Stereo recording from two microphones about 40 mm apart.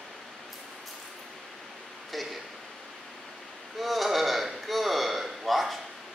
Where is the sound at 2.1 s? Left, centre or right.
Centre.